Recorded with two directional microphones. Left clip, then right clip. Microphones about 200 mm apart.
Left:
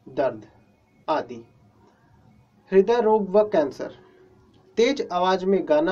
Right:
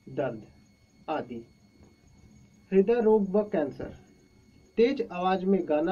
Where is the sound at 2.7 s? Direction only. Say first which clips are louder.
Left 4 dB; 20° left (ahead or behind).